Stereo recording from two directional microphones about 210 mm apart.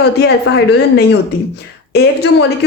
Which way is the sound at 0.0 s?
50° left (ahead or behind).